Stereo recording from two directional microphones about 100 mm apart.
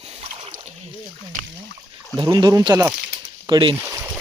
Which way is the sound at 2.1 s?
45° right (ahead or behind).